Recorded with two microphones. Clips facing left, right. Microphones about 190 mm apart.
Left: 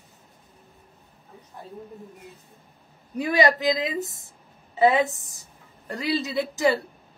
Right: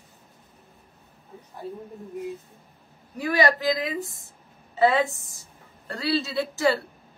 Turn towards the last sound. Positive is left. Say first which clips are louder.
# left 1 dB
turn(degrees=15)  # may be behind; listen again after turning